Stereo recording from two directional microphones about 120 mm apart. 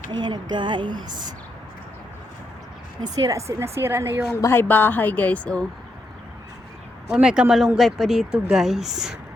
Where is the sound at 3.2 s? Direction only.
25° right (ahead or behind).